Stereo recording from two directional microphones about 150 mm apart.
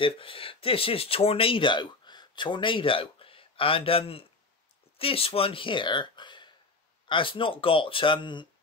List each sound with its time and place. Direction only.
0.0 s speech: 35° left (ahead or behind)